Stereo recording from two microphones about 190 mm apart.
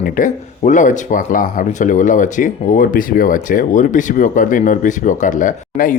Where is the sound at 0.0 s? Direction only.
40° left (ahead or behind).